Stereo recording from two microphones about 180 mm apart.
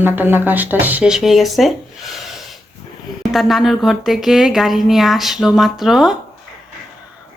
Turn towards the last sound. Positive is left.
turn(degrees=0)  # may be behind; listen again after turning